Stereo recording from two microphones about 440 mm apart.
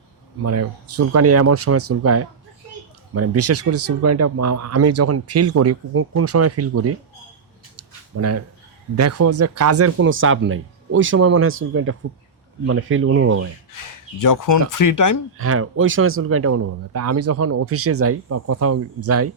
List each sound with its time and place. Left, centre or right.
0.4 s speech: right
7.8 s a sound: right
9.0 s speech: right
13.7 s speech: left
15.4 s speech: right